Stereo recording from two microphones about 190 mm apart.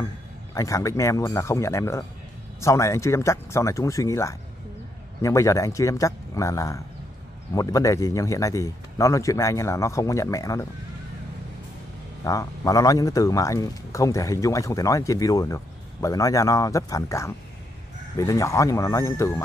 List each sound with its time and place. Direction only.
0.6 s speech: 15° left (ahead or behind)
12.3 s speech: 15° left (ahead or behind)